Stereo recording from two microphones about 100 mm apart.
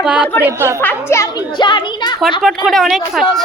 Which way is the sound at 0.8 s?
20° left (ahead or behind).